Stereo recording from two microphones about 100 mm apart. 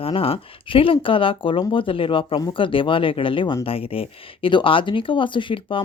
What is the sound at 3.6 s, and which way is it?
Speech, 70° left (ahead or behind).